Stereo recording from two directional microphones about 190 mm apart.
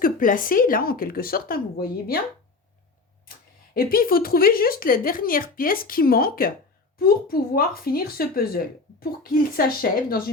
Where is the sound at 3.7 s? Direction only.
50° left (ahead or behind).